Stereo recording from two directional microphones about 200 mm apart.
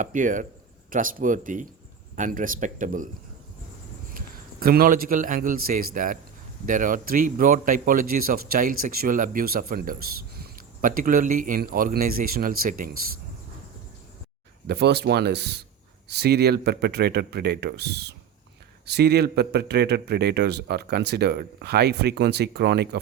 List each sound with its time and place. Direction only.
0.0 s speech: 40° right (ahead or behind)
4.6 s a man's voice: 45° right (ahead or behind)
14.7 s speech: 55° right (ahead or behind)